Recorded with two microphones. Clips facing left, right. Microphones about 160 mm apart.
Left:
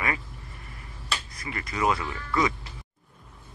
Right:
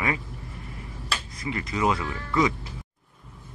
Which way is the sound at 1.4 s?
20° right (ahead or behind).